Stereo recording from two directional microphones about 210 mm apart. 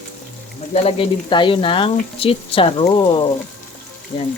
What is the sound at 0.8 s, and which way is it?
Speech, 25° left (ahead or behind).